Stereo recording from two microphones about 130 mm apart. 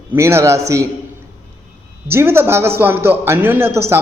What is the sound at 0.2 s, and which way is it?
Speech, 20° right (ahead or behind).